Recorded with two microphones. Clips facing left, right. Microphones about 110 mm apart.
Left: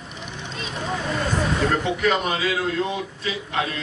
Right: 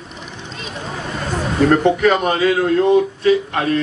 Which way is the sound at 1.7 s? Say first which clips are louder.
Right 8 dB; 50° right (ahead or behind).